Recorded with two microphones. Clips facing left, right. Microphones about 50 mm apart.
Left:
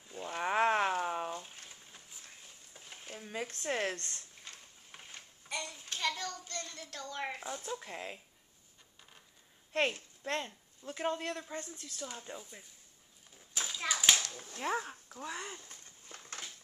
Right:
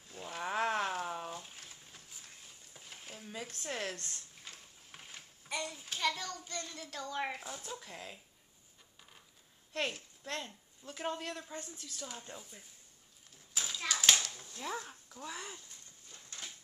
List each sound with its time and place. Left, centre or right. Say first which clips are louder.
0.0 s wild animals: left 4 dB; centre
0.4 s wild animals: left 4 dB; left
1.0 s a sound: left 4 dB; centre
1.3 s a sound: left 3 dB; centre
3.6 s speech: left 5 dB; left
3.9 s a child's voice: left 3 dB; centre
7.8 s speech: left 5 dB; left
10.2 s speech: left 5 dB; left
10.8 s speech: left 3 dB; centre
13.6 s children playing: left 1 dB; centre
14.4 s a sound: left 5 dB; left
15.2 s speech: left 3 dB; centre
16.1 s crushing: left 6 dB; left